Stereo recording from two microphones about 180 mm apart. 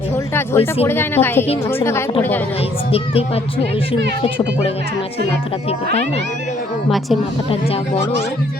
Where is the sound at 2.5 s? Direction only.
35° left (ahead or behind).